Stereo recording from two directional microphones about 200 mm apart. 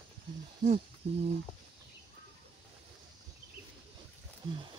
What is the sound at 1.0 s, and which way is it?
Lullaby, 35° right (ahead or behind).